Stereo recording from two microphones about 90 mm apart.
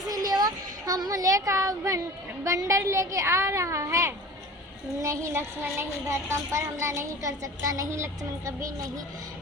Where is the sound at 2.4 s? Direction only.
35° right (ahead or behind).